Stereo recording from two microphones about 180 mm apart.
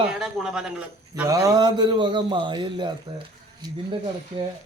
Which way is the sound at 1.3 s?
20° right (ahead or behind).